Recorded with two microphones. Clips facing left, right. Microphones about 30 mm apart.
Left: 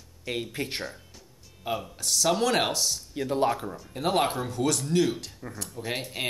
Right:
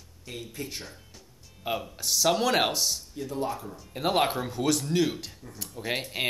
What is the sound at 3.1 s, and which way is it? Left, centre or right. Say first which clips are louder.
Speech: left 6 dB; left.